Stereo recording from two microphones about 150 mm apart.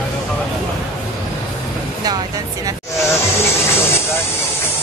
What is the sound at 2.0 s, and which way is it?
Speech, 25° right (ahead or behind).